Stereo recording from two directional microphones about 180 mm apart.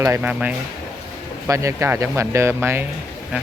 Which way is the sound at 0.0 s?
10° right (ahead or behind).